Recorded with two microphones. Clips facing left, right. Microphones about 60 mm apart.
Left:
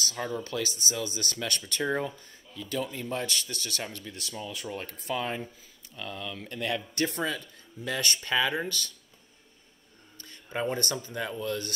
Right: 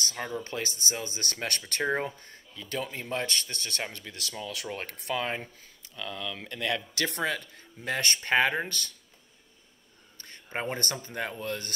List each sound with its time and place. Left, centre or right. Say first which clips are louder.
0.0 s speech: left 1 dB; right
4.6 s speech: even; right
5.9 s speech: right 1 dB; right
10.1 s speech: left 1 dB; right